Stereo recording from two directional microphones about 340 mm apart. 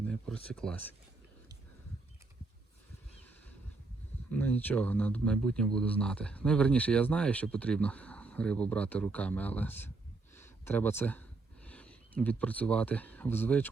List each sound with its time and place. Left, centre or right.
0.1 s speech: centre
4.3 s speech: centre
10.3 s a sound: centre